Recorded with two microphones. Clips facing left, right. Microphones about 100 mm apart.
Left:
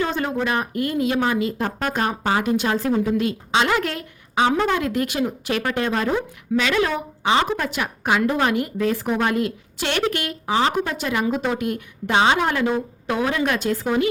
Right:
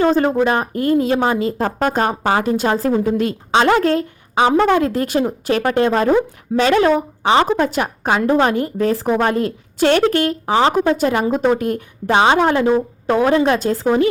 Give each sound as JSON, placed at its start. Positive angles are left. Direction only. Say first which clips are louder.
{"t": 0.0, "sound": "speech", "louder": "right 8 dB", "side_deg": -40}
{"t": 10.9, "sound": "speech", "louder": "right 6 dB", "side_deg": -40}